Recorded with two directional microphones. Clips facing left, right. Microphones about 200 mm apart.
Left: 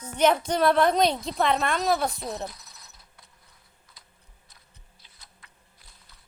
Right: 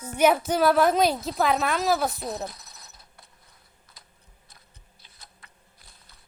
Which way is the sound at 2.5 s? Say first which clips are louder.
Right 2 dB; 45° right (ahead or behind).